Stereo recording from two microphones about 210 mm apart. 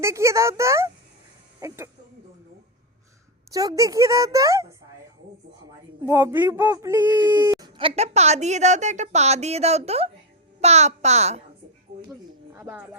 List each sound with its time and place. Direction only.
0.0 s a woman's voice: 15° right (ahead or behind)
3.5 s a woman's voice: 15° right (ahead or behind)
6.0 s a child's voice: 10° right (ahead or behind); by 11.4 s 30° right (ahead or behind)
12.5 s speech: 10° right (ahead or behind)